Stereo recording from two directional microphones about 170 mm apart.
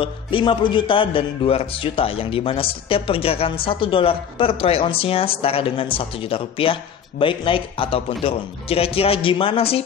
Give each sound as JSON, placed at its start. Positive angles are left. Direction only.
{"t": 0.0, "sound": "speech", "side_deg": 30}